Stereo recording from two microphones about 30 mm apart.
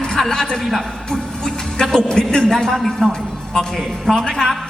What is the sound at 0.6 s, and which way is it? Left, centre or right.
A man's voice, centre.